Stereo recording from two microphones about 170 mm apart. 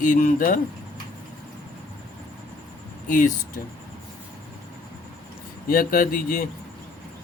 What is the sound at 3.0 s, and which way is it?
Speech, 50° left (ahead or behind).